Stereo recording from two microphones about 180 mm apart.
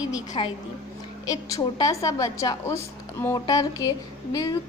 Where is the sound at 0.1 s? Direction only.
20° left (ahead or behind).